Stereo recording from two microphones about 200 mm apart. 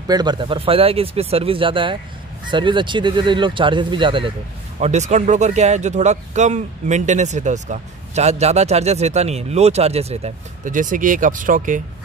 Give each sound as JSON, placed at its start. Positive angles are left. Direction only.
{"t": 0.1, "sound": "speech", "side_deg": -20}
{"t": 4.7, "sound": "speech", "side_deg": -35}